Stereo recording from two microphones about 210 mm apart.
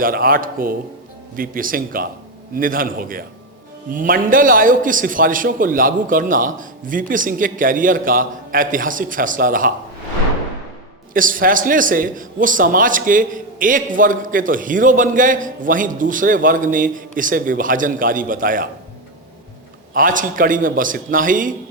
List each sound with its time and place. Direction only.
0.0 s a man's voice: 45° right (ahead or behind)
11.1 s a man's voice: 40° right (ahead or behind)
19.9 s a man's voice: 40° right (ahead or behind)